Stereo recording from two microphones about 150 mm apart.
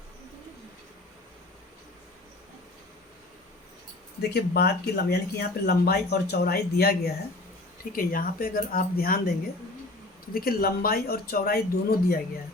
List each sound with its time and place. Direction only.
4.2 s speech: 90° left
7.9 s speech: 70° left (ahead or behind)
10.3 s speech: 85° left